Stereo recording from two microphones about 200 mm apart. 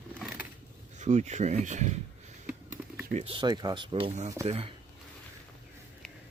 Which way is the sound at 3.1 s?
25° right (ahead or behind).